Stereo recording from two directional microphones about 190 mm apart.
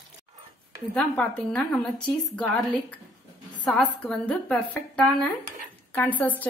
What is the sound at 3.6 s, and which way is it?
A woman's voice, 5° left (ahead or behind).